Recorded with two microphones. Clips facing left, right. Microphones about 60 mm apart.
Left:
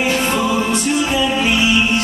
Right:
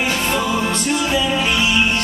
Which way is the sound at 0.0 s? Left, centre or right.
Centre.